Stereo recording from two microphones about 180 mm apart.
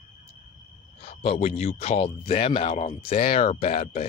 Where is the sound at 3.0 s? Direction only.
55° left (ahead or behind).